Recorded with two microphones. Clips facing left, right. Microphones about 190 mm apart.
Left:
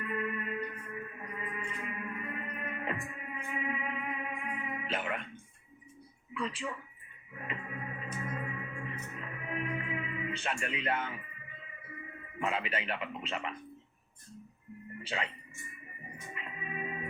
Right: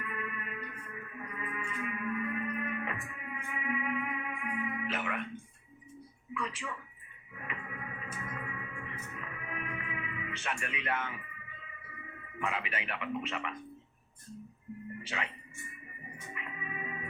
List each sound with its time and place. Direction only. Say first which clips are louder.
0.0 s music: left 5 dB; 30° left (ahead or behind)
6.3 s speech: left 2 dB; 25° left (ahead or behind)
7.4 s music: left 2 dB; 30° left (ahead or behind)
12.4 s speech: left 2 dB; 25° left (ahead or behind)
15.1 s speech: left 3 dB; 30° left (ahead or behind)
16.3 s music: left 1 dB; 30° left (ahead or behind)